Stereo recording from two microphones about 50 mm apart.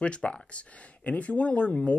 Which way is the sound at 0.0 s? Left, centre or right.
Left.